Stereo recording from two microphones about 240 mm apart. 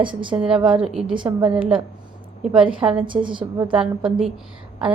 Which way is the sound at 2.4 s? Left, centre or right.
Centre.